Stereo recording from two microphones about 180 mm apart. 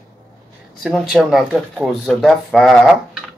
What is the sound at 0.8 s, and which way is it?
Speech, centre (ahead or behind).